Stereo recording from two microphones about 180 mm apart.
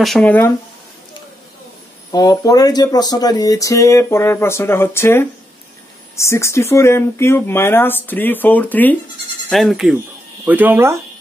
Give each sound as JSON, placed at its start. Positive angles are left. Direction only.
{"t": 0.0, "sound": "speech", "side_deg": 5}
{"t": 2.1, "sound": "speech", "side_deg": 20}